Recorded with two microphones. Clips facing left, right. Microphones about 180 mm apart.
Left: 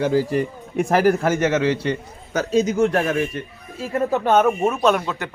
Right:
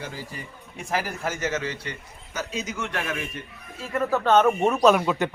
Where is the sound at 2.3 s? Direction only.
40° left (ahead or behind).